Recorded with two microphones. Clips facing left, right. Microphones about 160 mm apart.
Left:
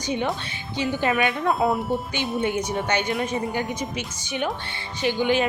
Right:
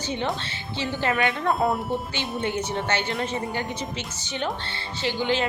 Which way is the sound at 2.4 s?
15° left (ahead or behind).